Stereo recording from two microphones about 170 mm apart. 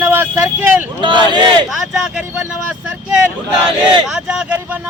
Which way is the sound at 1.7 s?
5° right (ahead or behind).